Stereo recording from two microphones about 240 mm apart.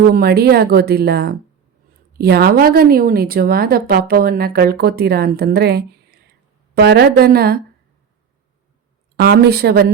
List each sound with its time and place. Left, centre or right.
0.1 s a woman's voice: right
9.2 s a woman's voice: right